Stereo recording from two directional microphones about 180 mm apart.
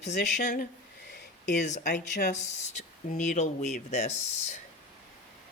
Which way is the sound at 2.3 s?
40° left (ahead or behind).